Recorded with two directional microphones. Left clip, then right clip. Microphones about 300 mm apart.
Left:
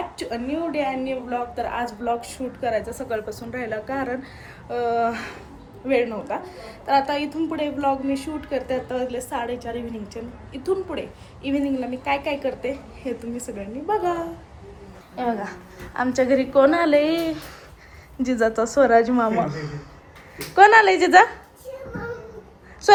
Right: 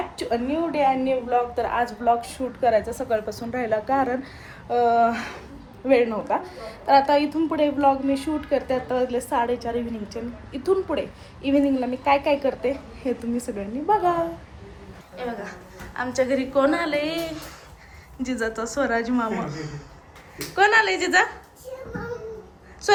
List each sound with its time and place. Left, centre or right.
0.2 s a woman's voice: centre
8.0 s a woman's voice: right
8.4 s a woman's voice: centre